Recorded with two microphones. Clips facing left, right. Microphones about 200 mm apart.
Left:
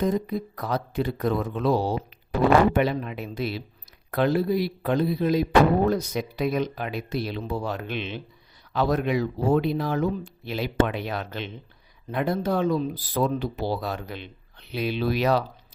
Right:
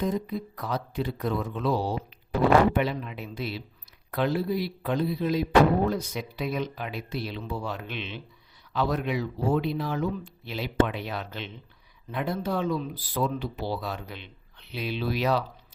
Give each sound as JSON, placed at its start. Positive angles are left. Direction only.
{"t": 0.0, "sound": "speech", "side_deg": 45}
{"t": 10.8, "sound": "speech", "side_deg": 60}
{"t": 12.1, "sound": "speech", "side_deg": 45}